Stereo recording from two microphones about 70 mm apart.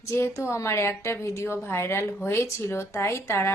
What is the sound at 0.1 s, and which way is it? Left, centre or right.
A woman's voice, left.